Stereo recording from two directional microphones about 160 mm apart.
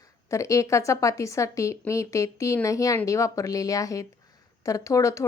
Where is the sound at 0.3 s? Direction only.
20° left (ahead or behind).